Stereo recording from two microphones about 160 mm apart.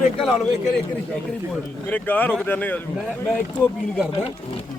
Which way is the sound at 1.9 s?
10° left (ahead or behind).